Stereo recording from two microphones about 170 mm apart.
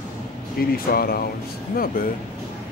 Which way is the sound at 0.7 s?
60° left (ahead or behind).